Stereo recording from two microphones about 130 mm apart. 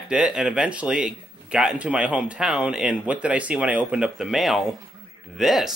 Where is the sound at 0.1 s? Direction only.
5° right (ahead or behind).